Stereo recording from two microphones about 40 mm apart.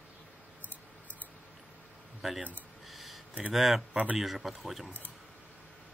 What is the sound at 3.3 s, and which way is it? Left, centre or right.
Speech, right.